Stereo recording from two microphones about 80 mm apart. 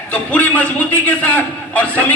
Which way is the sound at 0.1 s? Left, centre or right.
Centre.